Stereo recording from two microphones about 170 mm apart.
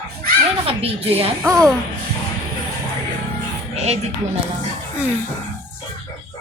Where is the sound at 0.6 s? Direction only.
35° right (ahead or behind).